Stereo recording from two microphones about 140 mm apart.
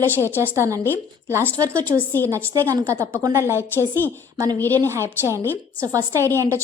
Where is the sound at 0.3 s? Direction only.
15° right (ahead or behind).